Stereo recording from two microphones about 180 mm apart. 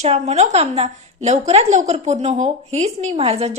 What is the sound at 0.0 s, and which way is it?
A woman's voice, 35° right (ahead or behind).